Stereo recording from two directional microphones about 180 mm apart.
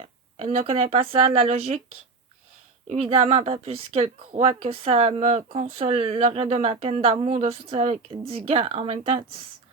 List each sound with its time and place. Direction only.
0.0 s speech: 35° right (ahead or behind)
2.8 s speech: 35° right (ahead or behind)